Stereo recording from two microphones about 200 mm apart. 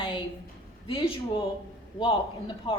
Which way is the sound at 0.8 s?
25° left (ahead or behind).